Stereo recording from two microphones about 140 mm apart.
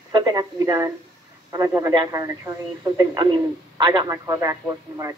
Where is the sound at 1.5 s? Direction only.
25° right (ahead or behind).